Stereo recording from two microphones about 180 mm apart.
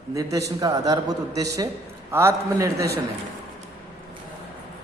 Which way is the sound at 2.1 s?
15° right (ahead or behind).